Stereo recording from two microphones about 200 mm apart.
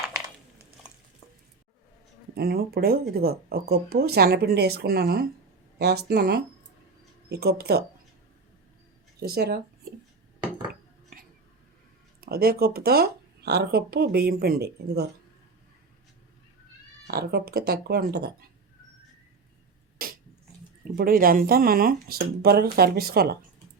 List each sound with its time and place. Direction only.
2.3 s speech: 50° right (ahead or behind)
9.2 s speech: 50° right (ahead or behind)
12.2 s speech: 50° right (ahead or behind)
17.1 s speech: 50° right (ahead or behind)
20.0 s a sound: 45° right (ahead or behind)
20.9 s speech: 45° right (ahead or behind)